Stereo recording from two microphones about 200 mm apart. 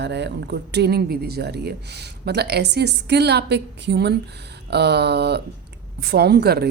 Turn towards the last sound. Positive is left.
turn(degrees=-55)  # may be behind; listen again after turning